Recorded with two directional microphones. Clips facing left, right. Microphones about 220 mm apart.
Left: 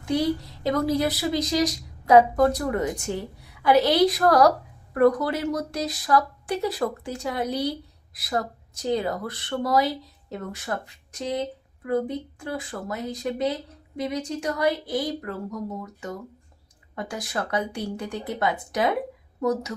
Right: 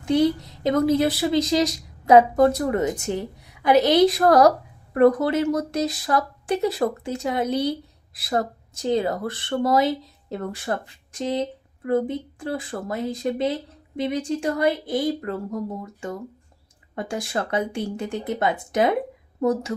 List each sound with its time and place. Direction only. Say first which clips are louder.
0.0 s a woman's voice: right 4 dB; 25° right (ahead or behind)
10.7 s speech: right 3 dB; 40° right (ahead or behind)
11.3 s a woman's voice: right 3 dB; 25° right (ahead or behind)